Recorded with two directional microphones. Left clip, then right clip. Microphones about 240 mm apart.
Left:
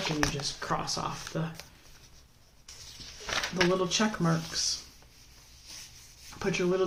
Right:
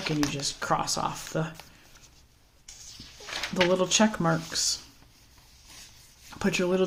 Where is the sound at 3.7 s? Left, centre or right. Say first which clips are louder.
Right 4 dB; right.